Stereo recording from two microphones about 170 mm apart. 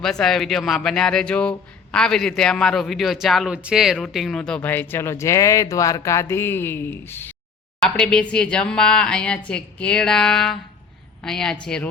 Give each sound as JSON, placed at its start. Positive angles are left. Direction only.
{"t": 0.0, "sound": "a man's voice", "side_deg": 5}